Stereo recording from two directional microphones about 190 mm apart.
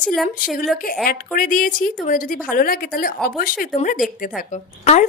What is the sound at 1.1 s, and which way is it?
A woman's voice, 45° left (ahead or behind).